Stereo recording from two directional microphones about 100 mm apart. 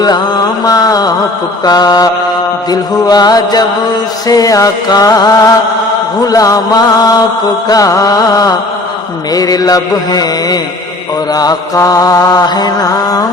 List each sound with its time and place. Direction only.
0.0 s mantra: 40° left (ahead or behind)